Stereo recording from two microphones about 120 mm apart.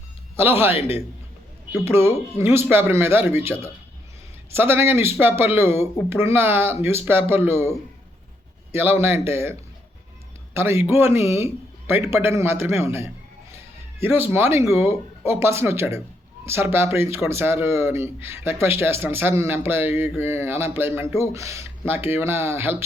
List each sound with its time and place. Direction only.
0.8 s a man's voice: 55° left (ahead or behind)
1.8 s speech: 20° right (ahead or behind)
8.7 s speech: 20° right (ahead or behind)